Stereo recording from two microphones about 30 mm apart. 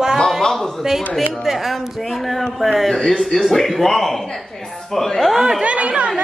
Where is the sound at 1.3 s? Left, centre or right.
Centre.